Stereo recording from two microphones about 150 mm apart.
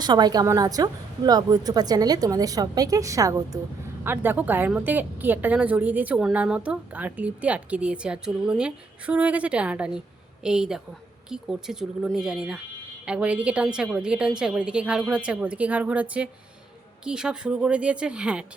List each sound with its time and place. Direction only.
0.0 s a woman's voice: 30° right (ahead or behind); by 18.4 s 10° right (ahead or behind)